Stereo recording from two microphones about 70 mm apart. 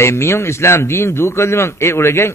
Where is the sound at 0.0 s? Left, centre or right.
Left.